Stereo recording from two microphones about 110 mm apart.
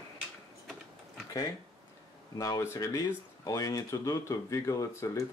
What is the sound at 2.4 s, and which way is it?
Speech, 35° left (ahead or behind).